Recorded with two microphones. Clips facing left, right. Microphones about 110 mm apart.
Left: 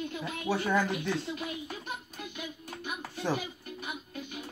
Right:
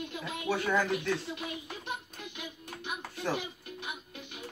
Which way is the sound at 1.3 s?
5° left (ahead or behind).